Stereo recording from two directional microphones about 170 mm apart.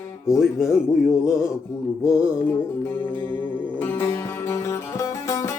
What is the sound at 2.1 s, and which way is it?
Music, 10° left (ahead or behind).